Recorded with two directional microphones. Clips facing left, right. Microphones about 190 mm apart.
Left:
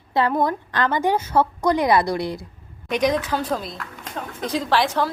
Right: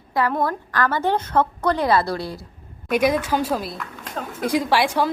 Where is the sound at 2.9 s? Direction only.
10° right (ahead or behind).